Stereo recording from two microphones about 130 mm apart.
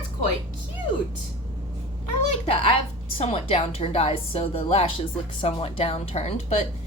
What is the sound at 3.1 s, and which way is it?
A woman's voice, 50° left (ahead or behind).